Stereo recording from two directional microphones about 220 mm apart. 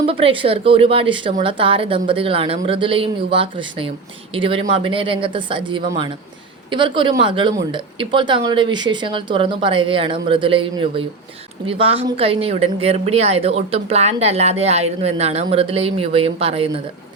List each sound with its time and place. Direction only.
0.0 s a woman's voice: 25° right (ahead or behind)